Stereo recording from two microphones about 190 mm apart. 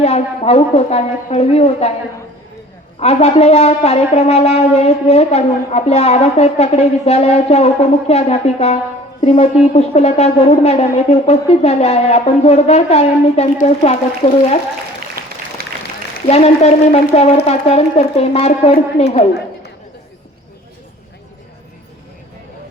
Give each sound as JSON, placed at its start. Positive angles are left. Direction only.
{"t": 0.0, "sound": "shofar", "side_deg": 35}
{"t": 3.0, "sound": "shofar", "side_deg": 30}
{"t": 16.2, "sound": "shofar", "side_deg": 35}